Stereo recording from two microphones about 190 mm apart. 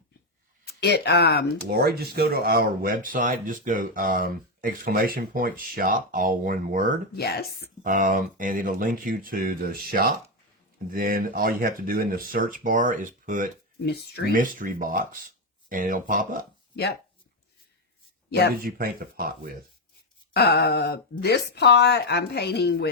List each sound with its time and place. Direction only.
0.6 s speech: 60° left (ahead or behind)
1.7 s speech: 55° right (ahead or behind)
7.2 s speech: 60° left (ahead or behind)
7.9 s speech: 45° right (ahead or behind)
13.8 s speech: 60° left (ahead or behind)
14.3 s speech: 45° right (ahead or behind)
18.3 s speech: 60° left (ahead or behind)
18.6 s speech: 50° right (ahead or behind)
20.3 s speech: 60° left (ahead or behind)